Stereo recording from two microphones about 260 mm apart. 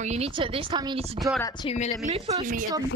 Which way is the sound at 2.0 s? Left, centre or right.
Right.